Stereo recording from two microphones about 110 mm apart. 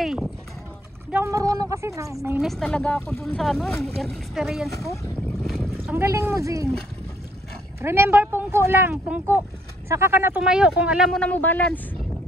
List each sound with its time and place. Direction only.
0.0 s run: centre (ahead or behind)
1.2 s speech: 30° right (ahead or behind)
2.4 s a woman's voice: 5° left (ahead or behind)
5.4 s boat: 5° left (ahead or behind)
5.9 s speech: 25° right (ahead or behind)
7.8 s speech: 20° right (ahead or behind)
8.9 s speech: 5° right (ahead or behind)
9.8 s speech: 25° right (ahead or behind)
10.4 s speech: 10° right (ahead or behind)
11.1 s a woman's voice: 10° left (ahead or behind)